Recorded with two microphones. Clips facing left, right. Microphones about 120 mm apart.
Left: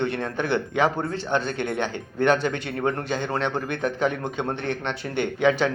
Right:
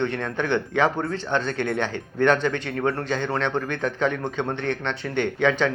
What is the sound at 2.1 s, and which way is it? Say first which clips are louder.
Speech: right 1 dB; 35° left (ahead or behind).